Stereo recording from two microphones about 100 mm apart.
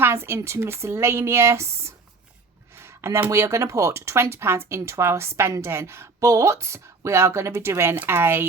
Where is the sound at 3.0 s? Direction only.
25° right (ahead or behind).